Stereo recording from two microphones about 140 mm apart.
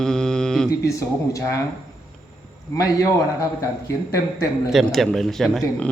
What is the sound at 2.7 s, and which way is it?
A man's voice, 25° left (ahead or behind).